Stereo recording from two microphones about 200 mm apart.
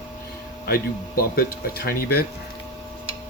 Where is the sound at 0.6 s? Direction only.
50° left (ahead or behind).